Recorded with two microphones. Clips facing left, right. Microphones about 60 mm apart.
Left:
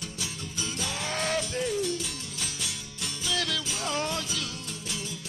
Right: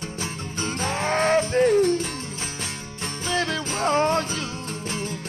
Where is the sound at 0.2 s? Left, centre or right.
Right.